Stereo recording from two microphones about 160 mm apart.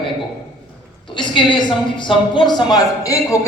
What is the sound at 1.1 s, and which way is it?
A woman's voice, 30° left (ahead or behind).